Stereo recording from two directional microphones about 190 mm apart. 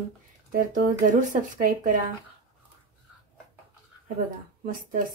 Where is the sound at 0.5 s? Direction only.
45° right (ahead or behind).